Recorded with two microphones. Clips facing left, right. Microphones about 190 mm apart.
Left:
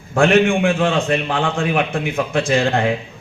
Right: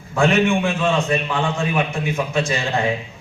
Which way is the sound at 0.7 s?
55° left (ahead or behind).